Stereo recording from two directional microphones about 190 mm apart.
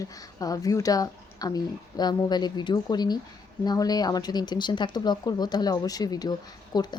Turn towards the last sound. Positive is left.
turn(degrees=20)  # may be behind; listen again after turning